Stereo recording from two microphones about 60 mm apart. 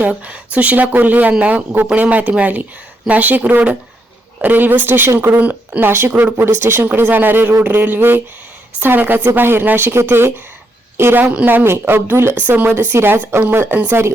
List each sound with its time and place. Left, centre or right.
0.0 s speech: right
5.8 s speech: right
6.4 s a woman's voice: right
11.2 s speech: right
12.5 s speech: right
12.7 s speech: right